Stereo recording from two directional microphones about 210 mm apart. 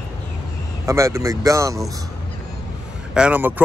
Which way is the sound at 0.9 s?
15° right (ahead or behind).